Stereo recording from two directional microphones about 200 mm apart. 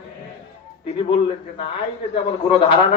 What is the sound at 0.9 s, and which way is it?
A man's voice, 25° left (ahead or behind).